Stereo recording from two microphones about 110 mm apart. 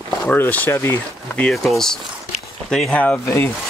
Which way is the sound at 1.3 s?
5° left (ahead or behind).